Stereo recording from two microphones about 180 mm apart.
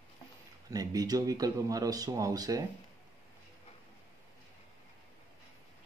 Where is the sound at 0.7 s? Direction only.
20° right (ahead or behind).